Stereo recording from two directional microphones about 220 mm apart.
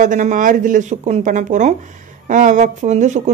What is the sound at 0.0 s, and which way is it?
Speech, 35° right (ahead or behind).